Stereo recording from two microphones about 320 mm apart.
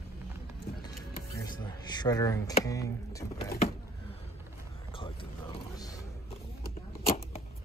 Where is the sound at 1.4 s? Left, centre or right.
Centre.